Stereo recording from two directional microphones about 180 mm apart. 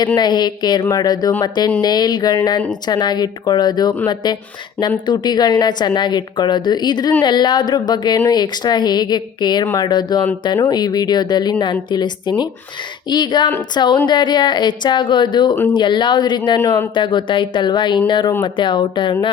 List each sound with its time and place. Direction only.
0.2 s a woman's voice: 25° left (ahead or behind)